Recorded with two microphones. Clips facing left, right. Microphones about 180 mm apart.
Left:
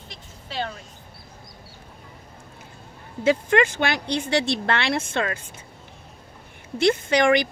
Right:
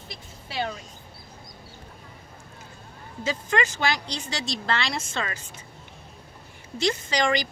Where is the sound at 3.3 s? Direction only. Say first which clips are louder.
Left 7 dB; 55° left (ahead or behind).